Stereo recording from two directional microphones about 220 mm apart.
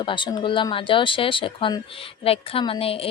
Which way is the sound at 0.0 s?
20° left (ahead or behind).